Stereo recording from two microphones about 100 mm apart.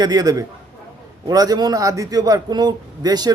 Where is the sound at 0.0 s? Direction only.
40° right (ahead or behind).